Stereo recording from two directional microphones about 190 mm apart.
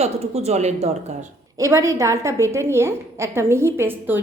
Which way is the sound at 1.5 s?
15° right (ahead or behind).